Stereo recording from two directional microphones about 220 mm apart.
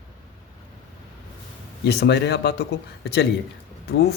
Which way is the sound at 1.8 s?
50° left (ahead or behind).